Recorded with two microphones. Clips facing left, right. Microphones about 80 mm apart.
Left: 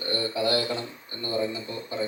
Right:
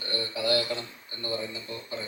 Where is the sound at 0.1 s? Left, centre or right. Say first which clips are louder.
Left 2 dB; left.